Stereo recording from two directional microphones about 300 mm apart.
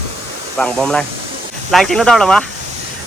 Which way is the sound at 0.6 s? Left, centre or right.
Centre.